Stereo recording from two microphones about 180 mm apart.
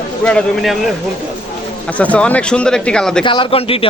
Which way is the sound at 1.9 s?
10° left (ahead or behind).